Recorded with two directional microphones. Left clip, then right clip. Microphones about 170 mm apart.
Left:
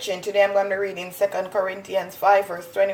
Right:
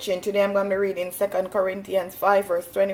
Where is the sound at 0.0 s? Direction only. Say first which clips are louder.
Left 2 dB; 35° right (ahead or behind).